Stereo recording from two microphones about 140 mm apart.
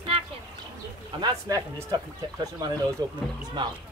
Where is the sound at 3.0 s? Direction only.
30° right (ahead or behind).